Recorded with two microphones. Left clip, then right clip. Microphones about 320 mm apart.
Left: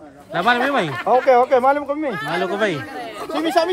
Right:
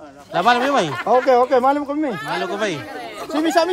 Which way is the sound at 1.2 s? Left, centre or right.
Right.